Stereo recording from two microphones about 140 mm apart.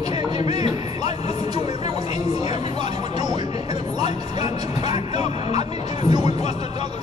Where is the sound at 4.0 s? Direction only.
50° left (ahead or behind).